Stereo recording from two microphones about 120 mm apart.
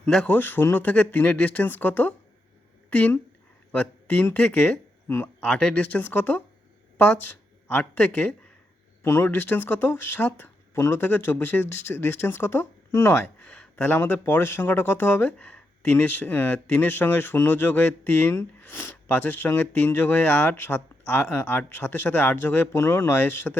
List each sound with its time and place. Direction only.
0.0 s speech: 10° left (ahead or behind)